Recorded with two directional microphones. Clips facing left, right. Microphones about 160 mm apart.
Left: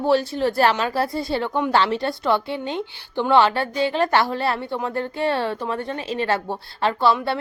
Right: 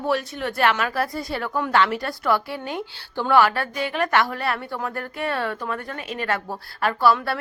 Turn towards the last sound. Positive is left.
turn(degrees=25)  # may be behind; listen again after turning